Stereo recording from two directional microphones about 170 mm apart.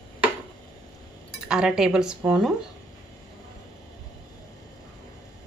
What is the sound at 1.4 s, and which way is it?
A woman's voice, 5° right (ahead or behind).